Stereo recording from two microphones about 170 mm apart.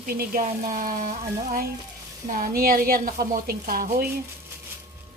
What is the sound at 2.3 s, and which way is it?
Speech, 60° right (ahead or behind).